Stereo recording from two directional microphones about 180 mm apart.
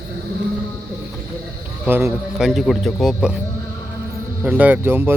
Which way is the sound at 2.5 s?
Centre (ahead or behind).